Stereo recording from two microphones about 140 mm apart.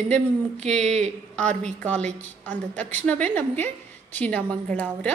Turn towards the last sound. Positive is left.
turn(degrees=10)  # may be behind; listen again after turning